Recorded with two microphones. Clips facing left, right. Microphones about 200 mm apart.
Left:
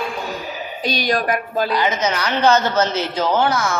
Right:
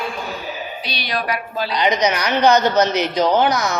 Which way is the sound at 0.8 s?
45° left (ahead or behind).